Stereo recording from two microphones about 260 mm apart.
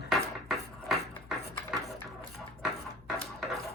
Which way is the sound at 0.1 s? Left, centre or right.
Centre.